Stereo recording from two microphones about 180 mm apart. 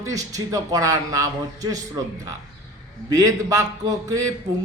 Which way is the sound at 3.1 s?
20° right (ahead or behind).